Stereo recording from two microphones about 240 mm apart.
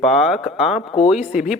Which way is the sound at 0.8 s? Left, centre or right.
Left.